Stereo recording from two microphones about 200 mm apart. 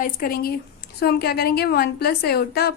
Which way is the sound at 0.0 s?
50° left (ahead or behind).